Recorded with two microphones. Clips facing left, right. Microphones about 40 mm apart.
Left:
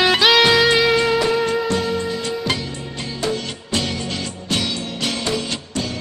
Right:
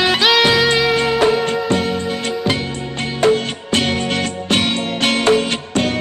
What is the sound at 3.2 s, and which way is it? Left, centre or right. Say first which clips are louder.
Music: right 10 dB; right.